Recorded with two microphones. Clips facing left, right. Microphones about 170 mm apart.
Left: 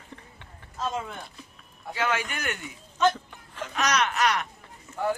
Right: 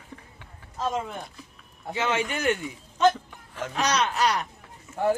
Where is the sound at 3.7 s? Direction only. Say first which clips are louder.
Right 1 dB; 30° right (ahead or behind).